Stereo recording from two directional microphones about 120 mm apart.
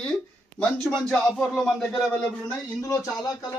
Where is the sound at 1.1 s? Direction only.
5° left (ahead or behind).